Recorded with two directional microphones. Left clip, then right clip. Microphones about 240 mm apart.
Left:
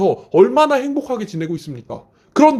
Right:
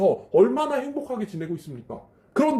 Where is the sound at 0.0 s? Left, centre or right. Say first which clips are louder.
Left 5 dB; left.